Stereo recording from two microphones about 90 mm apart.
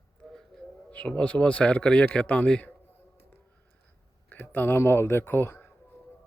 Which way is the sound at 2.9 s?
20° left (ahead or behind).